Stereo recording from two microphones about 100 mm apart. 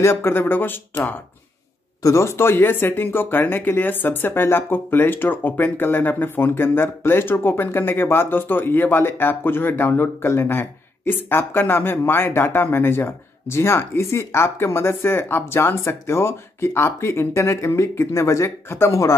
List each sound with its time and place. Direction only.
0.0 s speech: 25° left (ahead or behind)